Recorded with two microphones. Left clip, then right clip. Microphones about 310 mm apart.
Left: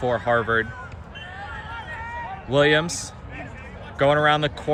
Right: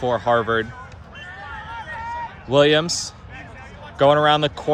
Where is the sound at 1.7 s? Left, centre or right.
Centre.